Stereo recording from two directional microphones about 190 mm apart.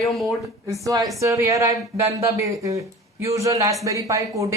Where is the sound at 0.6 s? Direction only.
15° right (ahead or behind).